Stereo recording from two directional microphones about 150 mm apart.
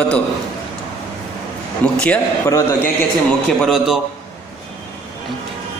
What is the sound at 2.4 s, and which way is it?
Speech, 20° left (ahead or behind).